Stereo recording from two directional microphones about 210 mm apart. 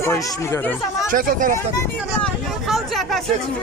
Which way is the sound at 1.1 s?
40° right (ahead or behind).